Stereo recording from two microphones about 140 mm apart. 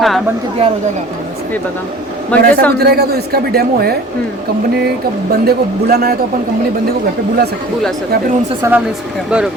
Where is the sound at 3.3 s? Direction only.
90° right.